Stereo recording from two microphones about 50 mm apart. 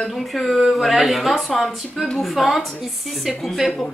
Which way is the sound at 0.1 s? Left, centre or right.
Centre.